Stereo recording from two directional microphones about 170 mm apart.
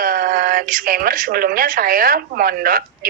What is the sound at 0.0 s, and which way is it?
A woman's voice, 55° right (ahead or behind).